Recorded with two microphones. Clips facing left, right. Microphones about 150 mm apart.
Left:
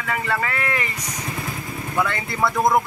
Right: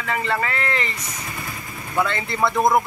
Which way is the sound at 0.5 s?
15° left (ahead or behind).